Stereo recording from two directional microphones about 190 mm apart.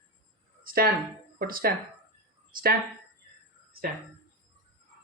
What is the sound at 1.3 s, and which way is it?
Speech, 50° right (ahead or behind).